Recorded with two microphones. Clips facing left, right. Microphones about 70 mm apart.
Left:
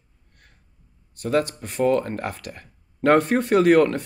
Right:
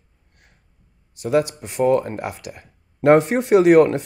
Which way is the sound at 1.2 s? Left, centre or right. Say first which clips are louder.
Right 3 dB; centre.